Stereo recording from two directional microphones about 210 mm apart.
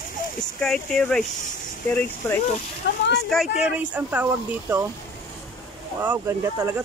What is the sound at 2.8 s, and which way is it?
Speech, 55° left (ahead or behind).